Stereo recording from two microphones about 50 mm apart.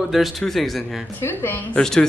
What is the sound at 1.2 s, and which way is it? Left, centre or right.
Speech, left.